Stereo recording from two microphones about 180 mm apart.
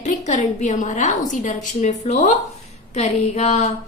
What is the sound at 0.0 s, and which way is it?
A woman's voice, 40° left (ahead or behind).